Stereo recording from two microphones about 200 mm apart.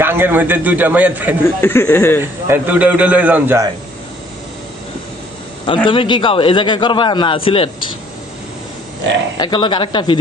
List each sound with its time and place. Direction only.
0.0 s a man's voice: 10° right (ahead or behind)
1.5 s speech: 10° left (ahead or behind)
2.2 s a man's voice: 10° right (ahead or behind)
5.6 s a man's voice: 25° left (ahead or behind)
9.4 s a man's voice: 20° left (ahead or behind)